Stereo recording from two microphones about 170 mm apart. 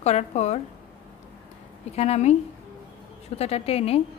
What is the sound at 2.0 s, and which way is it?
Speech, 40° left (ahead or behind).